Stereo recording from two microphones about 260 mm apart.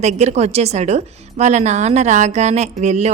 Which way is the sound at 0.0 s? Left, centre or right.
Right.